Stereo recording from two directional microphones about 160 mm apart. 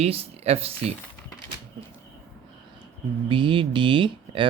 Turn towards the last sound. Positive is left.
turn(degrees=-30)  # may be behind; listen again after turning